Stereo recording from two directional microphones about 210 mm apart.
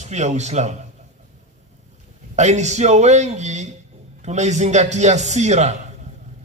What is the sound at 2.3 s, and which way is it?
A man's voice, 35° right (ahead or behind).